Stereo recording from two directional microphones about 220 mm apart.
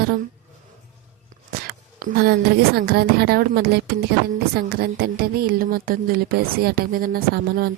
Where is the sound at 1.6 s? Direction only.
40° right (ahead or behind).